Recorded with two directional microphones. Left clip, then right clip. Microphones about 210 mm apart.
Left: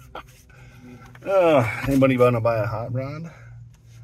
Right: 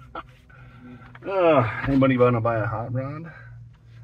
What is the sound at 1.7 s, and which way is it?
A man's voice, 15° left (ahead or behind).